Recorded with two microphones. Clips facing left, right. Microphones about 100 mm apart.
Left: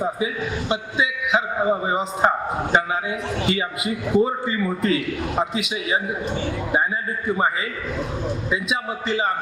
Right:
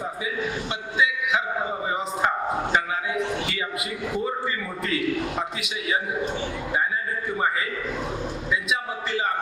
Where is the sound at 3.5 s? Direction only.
20° left (ahead or behind).